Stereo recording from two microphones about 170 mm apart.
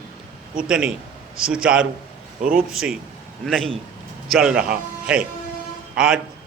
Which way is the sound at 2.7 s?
5° right (ahead or behind).